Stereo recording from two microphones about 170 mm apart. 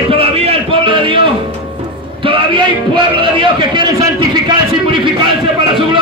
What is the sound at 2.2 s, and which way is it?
A man's voice, 30° right (ahead or behind).